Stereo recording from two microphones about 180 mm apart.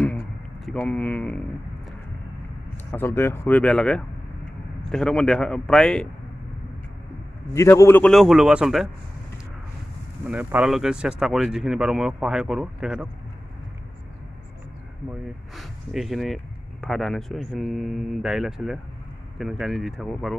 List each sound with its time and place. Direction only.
0.7 s speech: 5° left (ahead or behind)
2.9 s speech: 10° left (ahead or behind)
7.5 s speech: 15° left (ahead or behind)
8.1 s speech: centre (ahead or behind)
10.2 s speech: 10° right (ahead or behind)
15.5 s speech: centre (ahead or behind)